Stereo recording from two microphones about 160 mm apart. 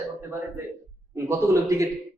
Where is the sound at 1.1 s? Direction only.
20° right (ahead or behind).